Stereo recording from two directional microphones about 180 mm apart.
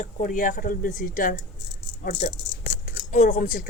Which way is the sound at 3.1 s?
45° left (ahead or behind).